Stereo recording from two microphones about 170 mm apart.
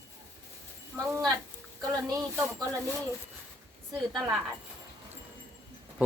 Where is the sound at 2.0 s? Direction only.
15° right (ahead or behind).